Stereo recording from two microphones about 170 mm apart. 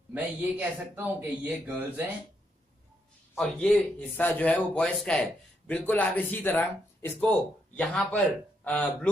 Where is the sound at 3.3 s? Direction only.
5° left (ahead or behind).